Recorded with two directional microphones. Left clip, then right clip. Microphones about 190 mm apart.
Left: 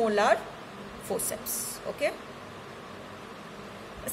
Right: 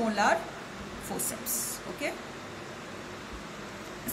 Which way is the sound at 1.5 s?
50° left (ahead or behind).